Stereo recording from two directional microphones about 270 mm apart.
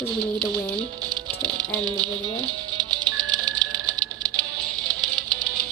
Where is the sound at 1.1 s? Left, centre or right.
Centre.